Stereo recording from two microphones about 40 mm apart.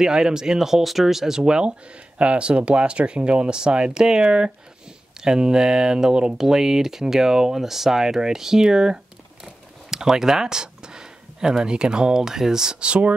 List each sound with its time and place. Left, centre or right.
0.0 s speech: centre
12.8 s speech: right